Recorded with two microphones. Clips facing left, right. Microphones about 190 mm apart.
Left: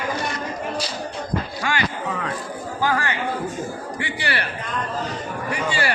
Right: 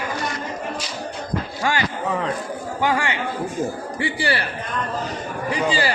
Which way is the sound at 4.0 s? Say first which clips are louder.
Right 5 dB; 30° right (ahead or behind).